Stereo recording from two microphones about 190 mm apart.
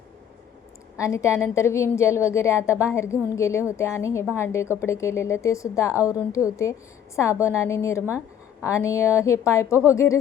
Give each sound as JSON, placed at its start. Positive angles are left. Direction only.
{"t": 0.9, "sound": "a woman's voice", "side_deg": 15}